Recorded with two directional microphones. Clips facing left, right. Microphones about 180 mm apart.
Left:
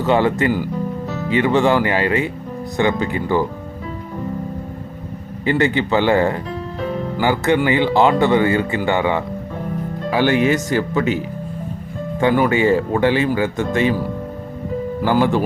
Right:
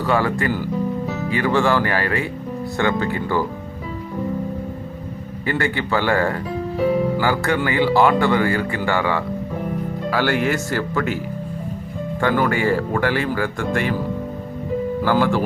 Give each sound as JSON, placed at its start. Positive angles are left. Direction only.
{"t": 0.0, "sound": "speech", "side_deg": 25}
{"t": 5.5, "sound": "speech", "side_deg": 20}
{"t": 12.2, "sound": "speech", "side_deg": 20}
{"t": 15.0, "sound": "speech", "side_deg": 20}